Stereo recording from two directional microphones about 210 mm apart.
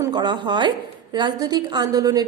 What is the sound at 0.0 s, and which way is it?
A woman's voice, 20° right (ahead or behind).